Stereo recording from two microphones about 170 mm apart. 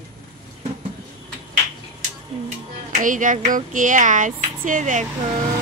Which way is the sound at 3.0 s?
50° right (ahead or behind).